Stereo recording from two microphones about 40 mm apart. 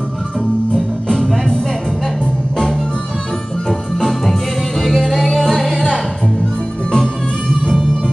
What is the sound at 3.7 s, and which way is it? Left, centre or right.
Music, centre.